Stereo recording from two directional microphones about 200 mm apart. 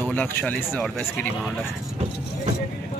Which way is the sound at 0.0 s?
10° left (ahead or behind).